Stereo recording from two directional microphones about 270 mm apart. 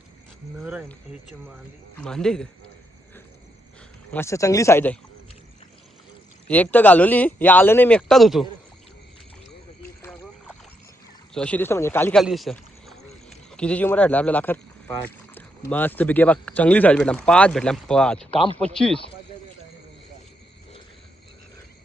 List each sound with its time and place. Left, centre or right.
0.6 s speech: centre
4.1 s speech: centre
6.5 s speech: centre
11.3 s speech: centre
13.0 s a sound: left
13.5 s speech: centre
18.3 s speech: centre
18.6 s speech: centre